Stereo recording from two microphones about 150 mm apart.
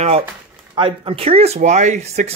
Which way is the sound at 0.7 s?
35° right (ahead or behind).